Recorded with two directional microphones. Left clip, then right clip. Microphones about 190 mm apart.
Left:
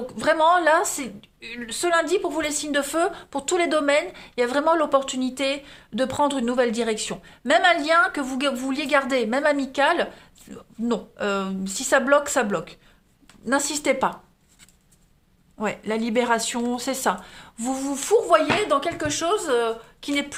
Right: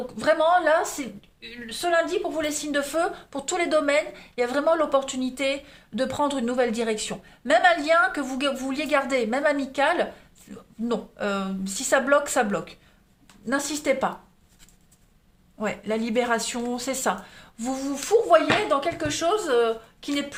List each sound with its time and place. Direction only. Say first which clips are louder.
0.2 s a woman's voice: left 2 dB; 35° left (ahead or behind)
13.4 s a woman's voice: left 3 dB; 35° left (ahead or behind)
15.5 s speech: left 1 dB; 25° left (ahead or behind)